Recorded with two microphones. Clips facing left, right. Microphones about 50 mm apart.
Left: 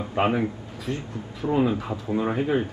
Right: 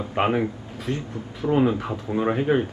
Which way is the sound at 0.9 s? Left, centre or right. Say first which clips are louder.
Right 2 dB; right.